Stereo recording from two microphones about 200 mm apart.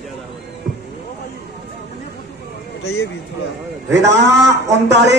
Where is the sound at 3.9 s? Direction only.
60° right (ahead or behind).